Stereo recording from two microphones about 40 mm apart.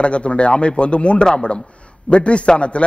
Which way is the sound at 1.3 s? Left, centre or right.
Centre.